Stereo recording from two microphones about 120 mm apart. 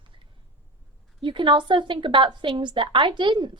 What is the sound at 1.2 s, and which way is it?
A woman's voice, 45° right (ahead or behind).